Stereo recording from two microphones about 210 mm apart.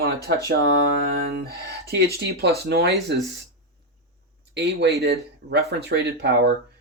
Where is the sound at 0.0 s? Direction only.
50° right (ahead or behind).